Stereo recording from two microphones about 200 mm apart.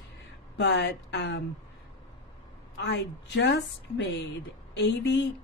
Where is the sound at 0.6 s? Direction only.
60° left (ahead or behind).